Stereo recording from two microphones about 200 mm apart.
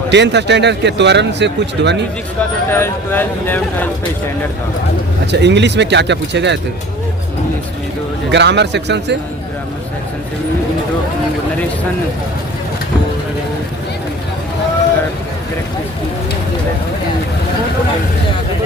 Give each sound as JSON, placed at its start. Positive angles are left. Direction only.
{"t": 0.1, "sound": "a man's voice", "side_deg": -60}
{"t": 2.6, "sound": "speech", "side_deg": 10}
{"t": 5.2, "sound": "a man's voice", "side_deg": -60}
{"t": 8.3, "sound": "a man's voice", "side_deg": -60}